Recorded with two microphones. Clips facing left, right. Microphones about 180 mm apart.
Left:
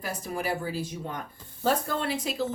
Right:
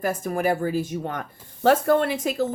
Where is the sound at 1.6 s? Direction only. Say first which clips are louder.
Right 9 dB; 65° right (ahead or behind); by 2.5 s 50° right (ahead or behind).